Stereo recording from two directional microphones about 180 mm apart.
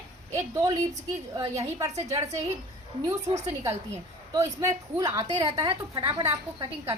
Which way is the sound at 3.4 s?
15° right (ahead or behind).